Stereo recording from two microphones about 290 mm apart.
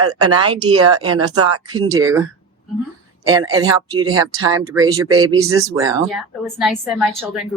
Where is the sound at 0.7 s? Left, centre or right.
Right.